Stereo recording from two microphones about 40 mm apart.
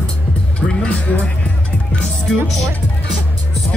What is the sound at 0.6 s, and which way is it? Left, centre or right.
Speech, left.